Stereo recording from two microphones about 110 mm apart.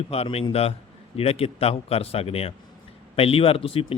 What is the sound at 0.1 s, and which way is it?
Speech, 65° left (ahead or behind).